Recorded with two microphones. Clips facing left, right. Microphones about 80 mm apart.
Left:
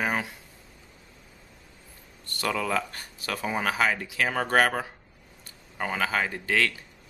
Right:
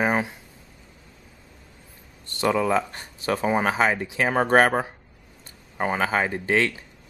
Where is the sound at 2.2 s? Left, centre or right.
Right.